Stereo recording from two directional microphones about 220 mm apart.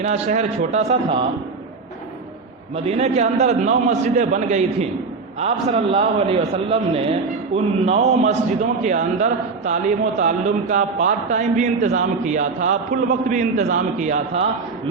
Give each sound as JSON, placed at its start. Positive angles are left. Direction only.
{"t": 0.0, "sound": "a man's voice", "side_deg": -30}
{"t": 2.7, "sound": "a man's voice", "side_deg": -30}